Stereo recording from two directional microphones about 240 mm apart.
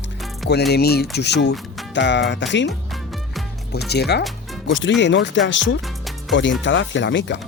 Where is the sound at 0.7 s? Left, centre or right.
Left.